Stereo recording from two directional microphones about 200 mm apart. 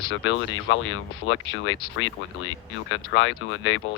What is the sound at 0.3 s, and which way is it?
Speech, 70° left (ahead or behind).